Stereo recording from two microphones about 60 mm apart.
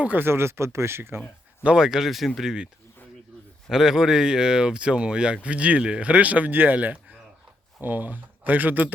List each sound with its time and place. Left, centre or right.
0.0 s speech: right
0.3 s speech: right
1.6 s speech: centre
3.7 s speech: centre; by 8.9 s right